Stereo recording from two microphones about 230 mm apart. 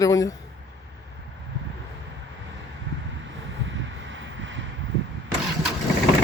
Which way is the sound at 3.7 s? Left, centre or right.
Right.